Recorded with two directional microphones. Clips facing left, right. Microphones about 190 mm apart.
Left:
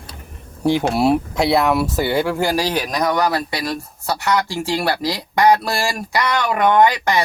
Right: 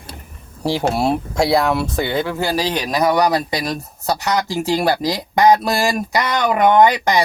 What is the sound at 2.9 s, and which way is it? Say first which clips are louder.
Speech: right 5 dB; 10° right (ahead or behind).